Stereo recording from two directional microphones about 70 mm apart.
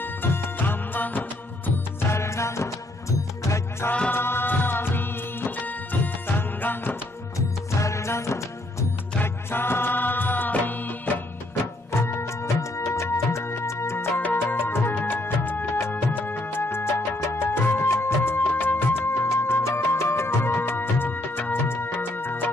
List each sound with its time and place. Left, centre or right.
0.0 s music: left
2.0 s music: left
4.1 s music: left
7.3 s music: left
9.2 s music: left
11.9 s music: left